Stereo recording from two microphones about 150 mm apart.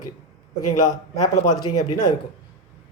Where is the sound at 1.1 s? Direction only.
25° left (ahead or behind).